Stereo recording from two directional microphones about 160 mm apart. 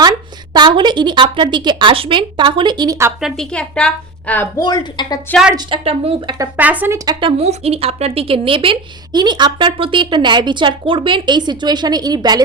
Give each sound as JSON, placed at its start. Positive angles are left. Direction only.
{"t": 0.5, "sound": "speech", "side_deg": -30}
{"t": 3.2, "sound": "a woman's voice", "side_deg": 0}
{"t": 4.6, "sound": "speech", "side_deg": 25}
{"t": 5.5, "sound": "speech", "side_deg": -35}
{"t": 6.6, "sound": "speech", "side_deg": -10}